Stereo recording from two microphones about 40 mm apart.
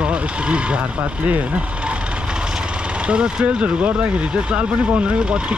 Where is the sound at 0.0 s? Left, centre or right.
Right.